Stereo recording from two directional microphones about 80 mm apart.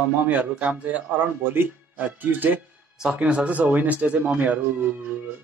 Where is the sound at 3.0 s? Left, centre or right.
Centre.